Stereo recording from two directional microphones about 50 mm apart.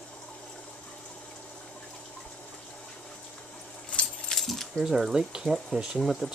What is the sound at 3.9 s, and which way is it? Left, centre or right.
Keys jangling, left.